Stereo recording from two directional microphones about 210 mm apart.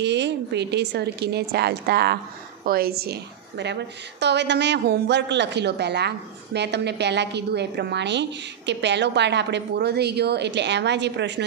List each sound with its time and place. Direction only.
0.0 s a woman's voice: 55° right (ahead or behind)